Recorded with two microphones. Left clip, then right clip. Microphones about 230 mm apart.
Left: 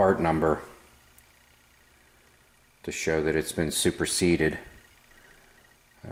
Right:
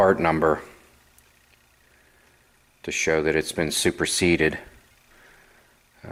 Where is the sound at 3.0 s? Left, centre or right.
Centre.